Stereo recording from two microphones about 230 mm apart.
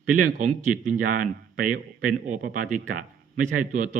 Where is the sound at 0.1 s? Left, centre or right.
Right.